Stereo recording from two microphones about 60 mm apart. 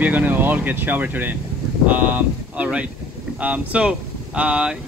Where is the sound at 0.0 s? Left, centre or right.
Right.